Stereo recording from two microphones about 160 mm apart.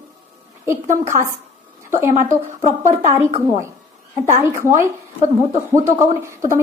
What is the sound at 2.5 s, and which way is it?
Speech, 50° right (ahead or behind).